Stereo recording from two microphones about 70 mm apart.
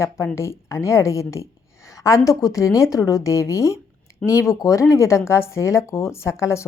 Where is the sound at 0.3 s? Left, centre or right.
Left.